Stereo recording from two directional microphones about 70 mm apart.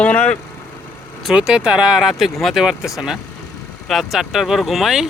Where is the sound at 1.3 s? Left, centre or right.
Centre.